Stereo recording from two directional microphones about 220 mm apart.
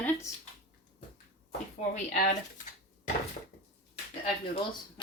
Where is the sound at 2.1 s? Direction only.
35° left (ahead or behind).